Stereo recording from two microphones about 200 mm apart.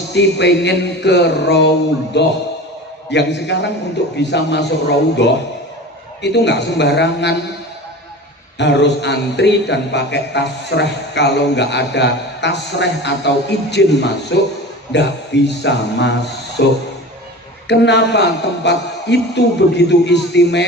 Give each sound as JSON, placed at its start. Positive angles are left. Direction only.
{"t": 0.1, "sound": "speech", "side_deg": 60}
{"t": 8.5, "sound": "speech", "side_deg": 60}